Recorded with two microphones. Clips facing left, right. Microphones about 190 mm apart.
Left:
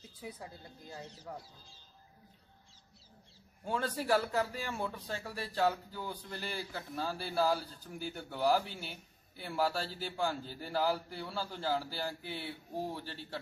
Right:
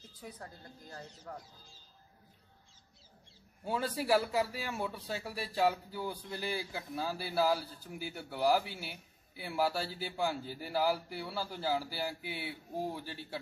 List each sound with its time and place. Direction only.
0.2 s speech: 10° left (ahead or behind)
3.6 s a man's voice: 10° right (ahead or behind)